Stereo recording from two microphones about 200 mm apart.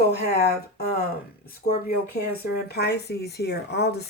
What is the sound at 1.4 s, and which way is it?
Speech, 50° left (ahead or behind).